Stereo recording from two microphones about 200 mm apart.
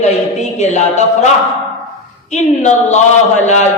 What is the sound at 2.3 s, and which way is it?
A man's voice, 35° left (ahead or behind).